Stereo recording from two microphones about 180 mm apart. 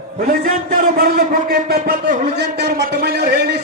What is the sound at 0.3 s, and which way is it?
A man's voice, 55° right (ahead or behind).